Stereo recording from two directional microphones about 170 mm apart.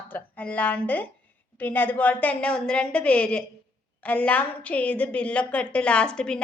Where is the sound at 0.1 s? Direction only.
10° left (ahead or behind).